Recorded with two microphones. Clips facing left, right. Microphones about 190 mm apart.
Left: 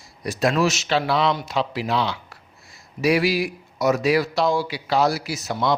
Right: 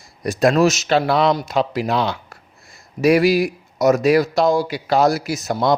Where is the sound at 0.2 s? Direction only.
45° right (ahead or behind).